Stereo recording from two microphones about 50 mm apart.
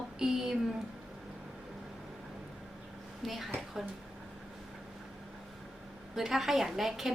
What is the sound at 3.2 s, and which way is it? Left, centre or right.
Speech, centre.